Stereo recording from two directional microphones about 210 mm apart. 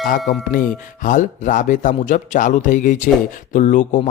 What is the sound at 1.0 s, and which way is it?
Speech, 40° left (ahead or behind).